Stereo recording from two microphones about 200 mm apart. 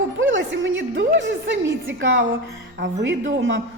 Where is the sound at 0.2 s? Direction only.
70° right (ahead or behind).